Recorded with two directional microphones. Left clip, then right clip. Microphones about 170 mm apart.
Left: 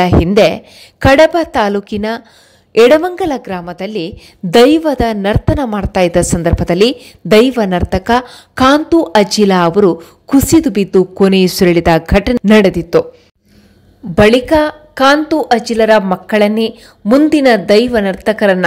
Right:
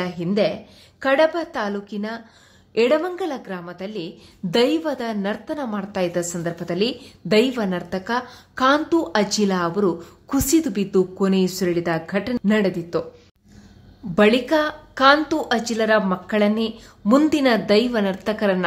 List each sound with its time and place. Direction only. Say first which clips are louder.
0.0 s a woman's voice: left 13 dB; 50° left (ahead or behind)
14.1 s a woman's voice: left 9 dB; 30° left (ahead or behind)